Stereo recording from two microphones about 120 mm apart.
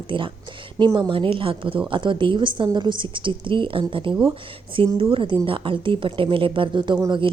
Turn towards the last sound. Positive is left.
turn(degrees=-35)  # may be behind; listen again after turning